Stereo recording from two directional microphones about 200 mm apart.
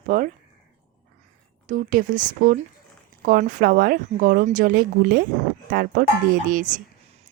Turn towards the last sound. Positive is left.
turn(degrees=-40)  # may be behind; listen again after turning